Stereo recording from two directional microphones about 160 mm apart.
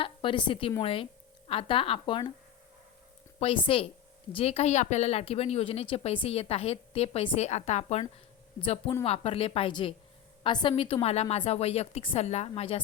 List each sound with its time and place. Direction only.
0.0 s speech: 35° left (ahead or behind)
3.4 s speech: 35° left (ahead or behind)